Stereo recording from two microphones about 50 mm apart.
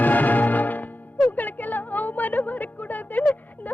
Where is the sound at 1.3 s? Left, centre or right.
Left.